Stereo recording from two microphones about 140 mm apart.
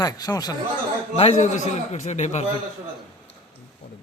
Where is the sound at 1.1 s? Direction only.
55° left (ahead or behind).